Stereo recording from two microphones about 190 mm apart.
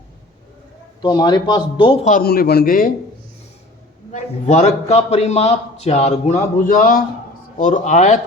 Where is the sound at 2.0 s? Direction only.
50° left (ahead or behind).